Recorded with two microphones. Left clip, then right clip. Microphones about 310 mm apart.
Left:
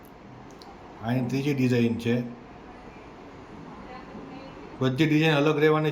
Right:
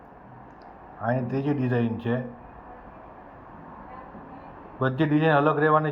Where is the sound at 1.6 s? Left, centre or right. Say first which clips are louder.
Left 2 dB; centre.